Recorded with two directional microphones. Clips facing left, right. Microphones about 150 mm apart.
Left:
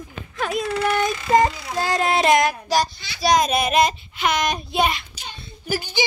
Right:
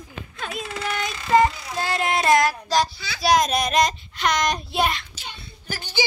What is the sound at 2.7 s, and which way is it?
Child singing, centre (ahead or behind).